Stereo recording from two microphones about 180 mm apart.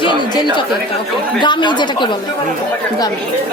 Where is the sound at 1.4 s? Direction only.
25° left (ahead or behind).